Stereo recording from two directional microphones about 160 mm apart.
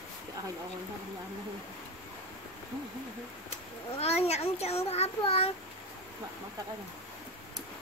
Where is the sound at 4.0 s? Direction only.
40° left (ahead or behind).